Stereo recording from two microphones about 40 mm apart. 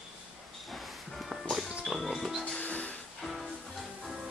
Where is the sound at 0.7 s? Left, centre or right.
Centre.